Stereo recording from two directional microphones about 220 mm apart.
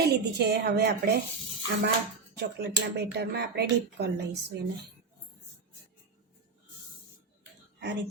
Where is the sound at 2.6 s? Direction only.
50° right (ahead or behind).